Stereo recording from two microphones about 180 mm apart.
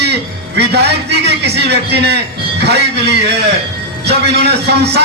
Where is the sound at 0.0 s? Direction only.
65° right (ahead or behind).